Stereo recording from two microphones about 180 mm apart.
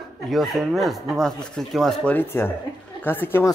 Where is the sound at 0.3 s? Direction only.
Centre (ahead or behind).